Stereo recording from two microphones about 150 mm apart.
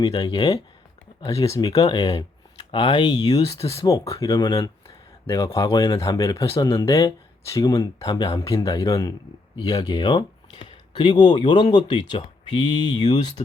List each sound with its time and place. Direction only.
0.1 s speech: 30° left (ahead or behind)
1.7 s speech: 25° left (ahead or behind)
3.8 s speech: 20° left (ahead or behind)